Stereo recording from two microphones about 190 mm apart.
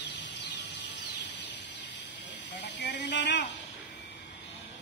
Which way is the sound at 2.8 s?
65° left (ahead or behind).